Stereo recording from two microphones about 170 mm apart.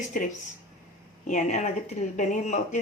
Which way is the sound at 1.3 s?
45° left (ahead or behind).